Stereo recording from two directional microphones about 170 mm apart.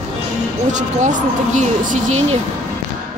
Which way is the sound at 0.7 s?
45° right (ahead or behind).